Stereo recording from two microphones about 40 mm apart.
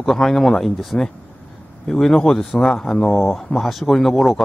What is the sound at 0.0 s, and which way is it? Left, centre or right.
Speech, centre.